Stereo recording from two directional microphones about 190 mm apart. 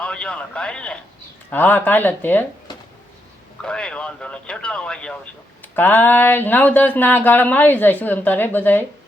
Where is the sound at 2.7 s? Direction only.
25° left (ahead or behind).